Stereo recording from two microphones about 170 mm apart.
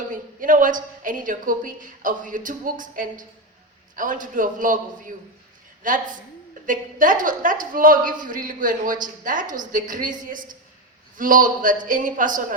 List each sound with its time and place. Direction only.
0.1 s a woman's voice: 50° right (ahead or behind)